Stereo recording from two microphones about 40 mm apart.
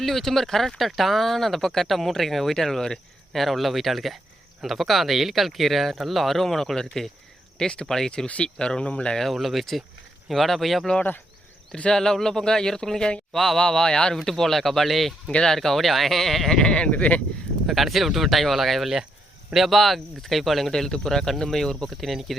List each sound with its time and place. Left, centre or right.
0.0 s speech: centre; by 9.1 s left
9.3 s speech: centre
11.7 s speech: left
13.3 s speech: centre
13.6 s speech: centre
16.6 s speech: left
17.7 s speech: centre
22.0 s speech: centre